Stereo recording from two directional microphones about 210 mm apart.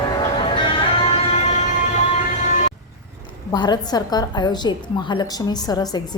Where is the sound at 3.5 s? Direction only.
20° left (ahead or behind).